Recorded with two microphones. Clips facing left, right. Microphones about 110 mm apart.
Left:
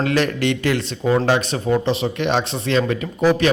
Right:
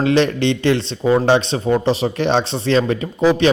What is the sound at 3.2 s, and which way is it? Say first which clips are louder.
Speech: right 2 dB; 20° right (ahead or behind).